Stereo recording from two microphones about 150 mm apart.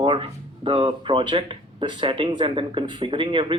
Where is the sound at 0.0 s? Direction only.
35° right (ahead or behind).